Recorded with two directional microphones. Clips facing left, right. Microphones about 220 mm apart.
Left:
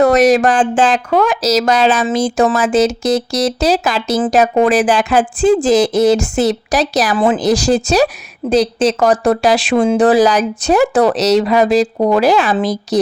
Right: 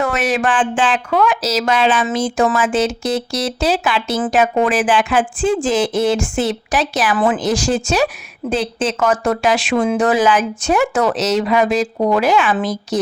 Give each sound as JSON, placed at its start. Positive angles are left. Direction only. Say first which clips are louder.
{"t": 0.0, "sound": "speech", "louder": "left 8 dB", "side_deg": 40}